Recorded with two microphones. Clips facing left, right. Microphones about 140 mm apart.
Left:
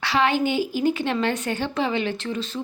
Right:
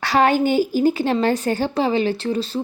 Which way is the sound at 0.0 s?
45° right (ahead or behind).